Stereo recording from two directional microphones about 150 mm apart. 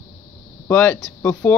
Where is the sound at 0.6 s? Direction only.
15° left (ahead or behind).